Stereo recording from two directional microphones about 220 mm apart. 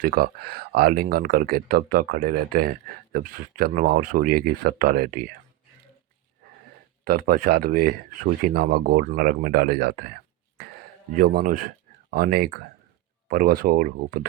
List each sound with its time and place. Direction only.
0.0 s speech: 45° right (ahead or behind)
7.0 s speech: 40° right (ahead or behind)
11.2 s speech: 40° right (ahead or behind)